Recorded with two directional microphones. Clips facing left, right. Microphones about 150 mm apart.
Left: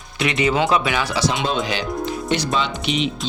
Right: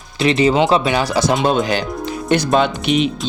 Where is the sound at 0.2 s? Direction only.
30° right (ahead or behind).